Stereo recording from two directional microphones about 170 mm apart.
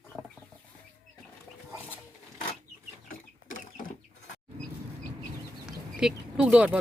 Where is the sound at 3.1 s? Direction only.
50° left (ahead or behind).